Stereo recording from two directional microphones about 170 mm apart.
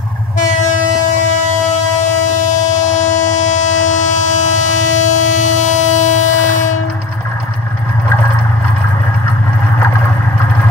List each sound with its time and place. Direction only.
2.0 s train: 45° left (ahead or behind)